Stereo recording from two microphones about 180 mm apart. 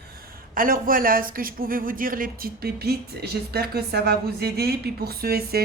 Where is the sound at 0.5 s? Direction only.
50° right (ahead or behind).